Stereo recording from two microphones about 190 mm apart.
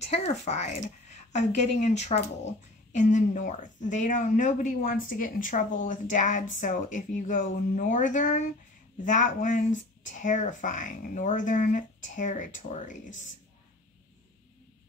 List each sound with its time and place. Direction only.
0.0 s speech: 35° left (ahead or behind)